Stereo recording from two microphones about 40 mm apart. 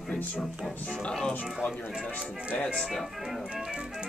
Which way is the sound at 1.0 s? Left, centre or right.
Left.